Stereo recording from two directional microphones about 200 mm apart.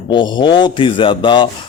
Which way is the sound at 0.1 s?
25° left (ahead or behind).